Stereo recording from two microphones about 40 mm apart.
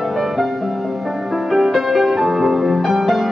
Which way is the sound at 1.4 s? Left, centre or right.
Centre.